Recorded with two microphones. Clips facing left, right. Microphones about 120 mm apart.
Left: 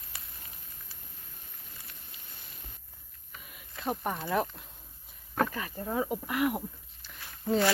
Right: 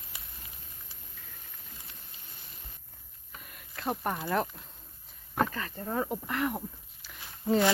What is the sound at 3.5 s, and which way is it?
Speech, centre (ahead or behind).